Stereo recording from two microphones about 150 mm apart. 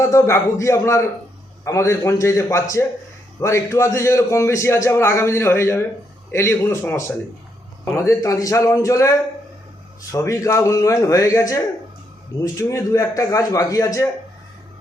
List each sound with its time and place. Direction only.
0.0 s a man's voice: 20° left (ahead or behind)